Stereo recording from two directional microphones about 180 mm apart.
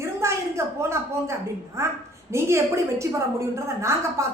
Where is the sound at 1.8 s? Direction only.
15° right (ahead or behind).